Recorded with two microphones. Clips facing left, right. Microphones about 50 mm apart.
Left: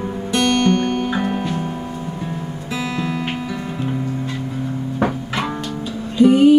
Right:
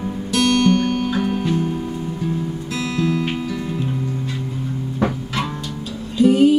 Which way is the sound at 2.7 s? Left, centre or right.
Centre.